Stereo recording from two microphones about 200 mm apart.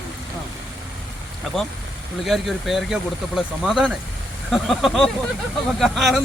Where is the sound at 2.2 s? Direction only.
Centre (ahead or behind).